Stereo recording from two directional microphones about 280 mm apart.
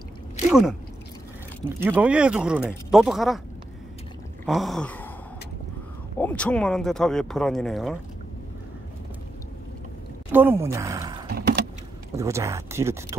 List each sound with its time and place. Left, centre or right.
0.5 s speech: centre
4.5 s a sound: centre
6.1 s speech: centre
10.3 s speech: centre
11.2 s vehicle: right
12.2 s speech: centre